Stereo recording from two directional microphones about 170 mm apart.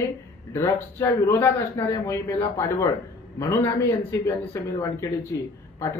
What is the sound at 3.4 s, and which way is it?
Speech, 15° left (ahead or behind).